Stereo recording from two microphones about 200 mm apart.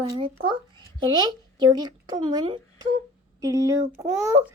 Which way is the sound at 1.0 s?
20° right (ahead or behind).